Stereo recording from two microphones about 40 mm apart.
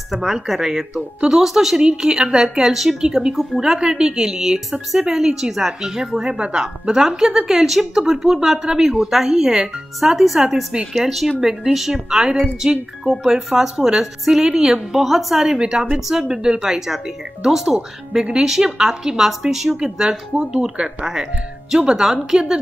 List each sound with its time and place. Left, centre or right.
0.1 s speech: centre
1.8 s speech: centre
4.3 s speech: centre
9.9 s speech: centre
10.9 s speech: centre
13.0 s speech: right
13.7 s speech: centre
15.0 s speech: centre
15.6 s speech: centre
19.8 s speech: right
21.0 s speech: centre